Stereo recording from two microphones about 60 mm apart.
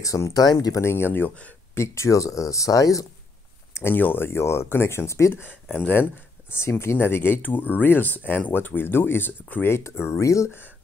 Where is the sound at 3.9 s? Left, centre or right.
Left.